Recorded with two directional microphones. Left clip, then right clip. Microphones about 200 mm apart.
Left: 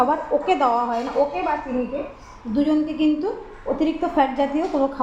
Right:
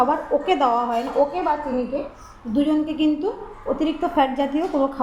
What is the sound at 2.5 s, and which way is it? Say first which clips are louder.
A woman's voice: even; 5° right (ahead or behind).